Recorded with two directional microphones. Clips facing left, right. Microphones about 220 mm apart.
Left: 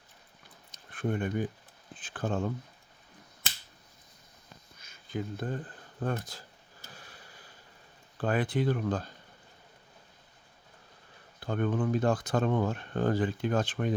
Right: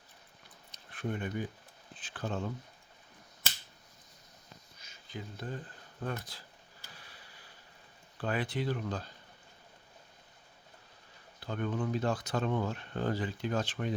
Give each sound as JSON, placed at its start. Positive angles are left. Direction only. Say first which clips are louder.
{"t": 0.7, "sound": "a sound", "louder": "left 5 dB", "side_deg": 50}
{"t": 2.0, "sound": "speech", "louder": "left 5 dB", "side_deg": 50}
{"t": 4.8, "sound": "a sound", "louder": "left 9 dB", "side_deg": 55}
{"t": 6.0, "sound": "speech", "louder": "left 5 dB", "side_deg": 45}
{"t": 6.9, "sound": "sniff", "louder": "left 5 dB", "side_deg": 45}
{"t": 8.2, "sound": "speech", "louder": "left 5 dB", "side_deg": 50}
{"t": 11.3, "sound": "speech", "louder": "left 5 dB", "side_deg": 50}